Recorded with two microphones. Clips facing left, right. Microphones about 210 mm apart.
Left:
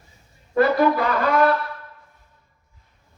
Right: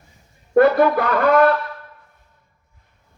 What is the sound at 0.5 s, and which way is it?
Music, 55° right (ahead or behind).